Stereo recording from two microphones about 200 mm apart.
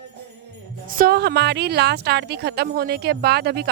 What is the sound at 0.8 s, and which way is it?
A woman's voice, 45° right (ahead or behind).